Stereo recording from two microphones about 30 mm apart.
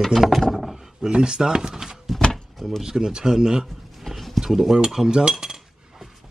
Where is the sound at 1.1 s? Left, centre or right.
Right.